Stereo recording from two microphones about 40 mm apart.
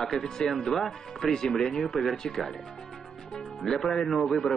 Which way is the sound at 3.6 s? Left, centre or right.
Centre.